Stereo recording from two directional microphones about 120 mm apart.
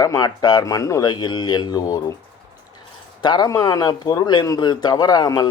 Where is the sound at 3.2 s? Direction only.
35° left (ahead or behind).